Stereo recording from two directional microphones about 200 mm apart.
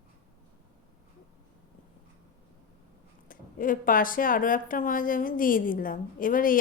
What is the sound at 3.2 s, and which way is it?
A woman's voice, 45° left (ahead or behind).